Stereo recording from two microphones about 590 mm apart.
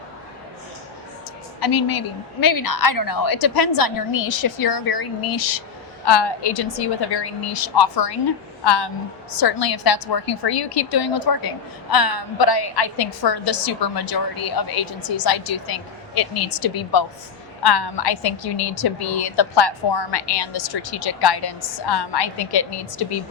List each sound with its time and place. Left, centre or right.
1.6 s a woman's voice: left